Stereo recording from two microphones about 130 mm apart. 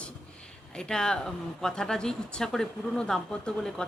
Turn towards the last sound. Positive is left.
turn(degrees=5)  # may be behind; listen again after turning